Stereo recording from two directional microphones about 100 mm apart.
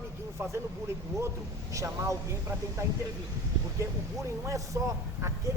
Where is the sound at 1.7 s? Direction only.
30° right (ahead or behind).